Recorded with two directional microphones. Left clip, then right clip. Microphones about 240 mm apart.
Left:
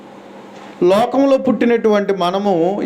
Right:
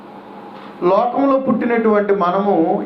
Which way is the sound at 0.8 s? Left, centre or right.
Left.